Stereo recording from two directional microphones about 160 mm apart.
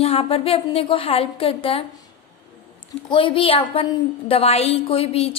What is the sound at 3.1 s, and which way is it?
A woman's voice, 30° left (ahead or behind).